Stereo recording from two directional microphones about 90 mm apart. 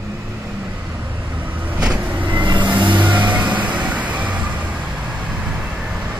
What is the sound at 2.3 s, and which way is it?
Vehicle, 55° right (ahead or behind).